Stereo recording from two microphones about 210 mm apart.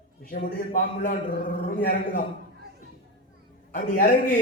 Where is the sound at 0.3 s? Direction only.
40° left (ahead or behind).